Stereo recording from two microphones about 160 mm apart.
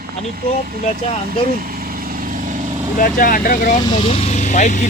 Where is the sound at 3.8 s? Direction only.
30° left (ahead or behind); by 4.8 s 50° left (ahead or behind).